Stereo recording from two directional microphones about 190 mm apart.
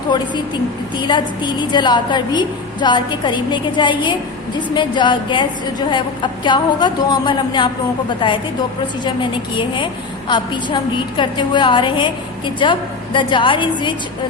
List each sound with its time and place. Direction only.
0.1 s a woman's voice: 25° left (ahead or behind)
9.6 s a woman's voice: 25° left (ahead or behind)